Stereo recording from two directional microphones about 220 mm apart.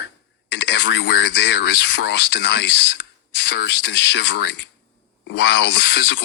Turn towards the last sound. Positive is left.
turn(degrees=55)  # may be behind; listen again after turning